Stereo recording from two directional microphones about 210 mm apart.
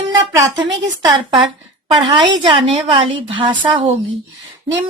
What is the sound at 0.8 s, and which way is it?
A woman's voice, 20° right (ahead or behind).